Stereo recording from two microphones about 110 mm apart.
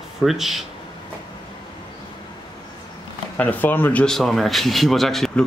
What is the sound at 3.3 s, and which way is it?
Speech, 15° left (ahead or behind).